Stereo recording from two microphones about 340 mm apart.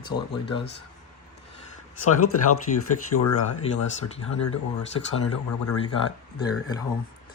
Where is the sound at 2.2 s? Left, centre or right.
Left.